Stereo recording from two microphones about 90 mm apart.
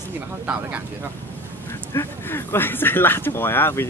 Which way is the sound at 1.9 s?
30° left (ahead or behind).